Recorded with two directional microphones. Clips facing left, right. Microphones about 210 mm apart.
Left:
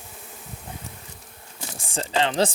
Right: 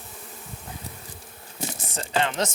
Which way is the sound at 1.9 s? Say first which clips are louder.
Left 3 dB; 30° left (ahead or behind).